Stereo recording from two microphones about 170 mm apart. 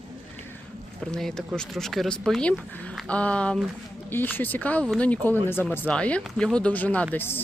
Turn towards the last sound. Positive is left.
turn(degrees=15)  # may be behind; listen again after turning